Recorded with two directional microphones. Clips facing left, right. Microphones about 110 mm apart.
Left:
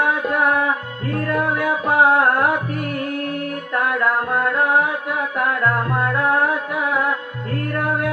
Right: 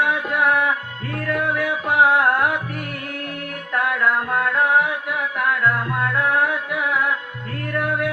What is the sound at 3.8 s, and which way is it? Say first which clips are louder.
Music: left 1 dB; 40° left (ahead or behind).